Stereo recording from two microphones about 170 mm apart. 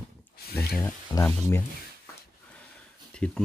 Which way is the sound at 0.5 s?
10° left (ahead or behind).